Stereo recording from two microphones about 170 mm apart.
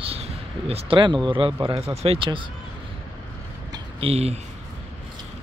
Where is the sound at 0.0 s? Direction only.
35° right (ahead or behind).